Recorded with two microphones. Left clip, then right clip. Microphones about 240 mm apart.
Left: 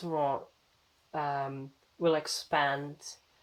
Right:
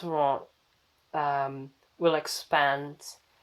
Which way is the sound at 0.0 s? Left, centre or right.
Right.